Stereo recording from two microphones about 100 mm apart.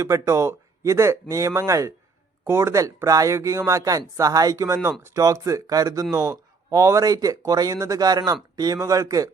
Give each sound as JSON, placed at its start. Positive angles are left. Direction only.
{"t": 0.0, "sound": "a man's voice", "side_deg": -30}